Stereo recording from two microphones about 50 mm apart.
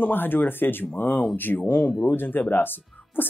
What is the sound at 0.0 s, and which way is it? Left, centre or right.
Speech, left.